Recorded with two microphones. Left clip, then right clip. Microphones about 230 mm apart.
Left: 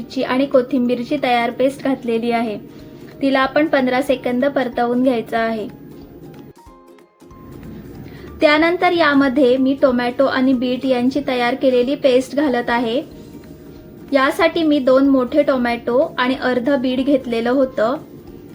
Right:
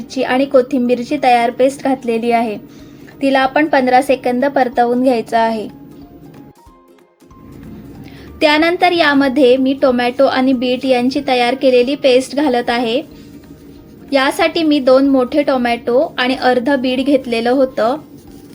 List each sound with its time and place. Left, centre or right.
0.1 s a woman's voice: right
8.4 s a woman's voice: right
14.1 s a woman's voice: right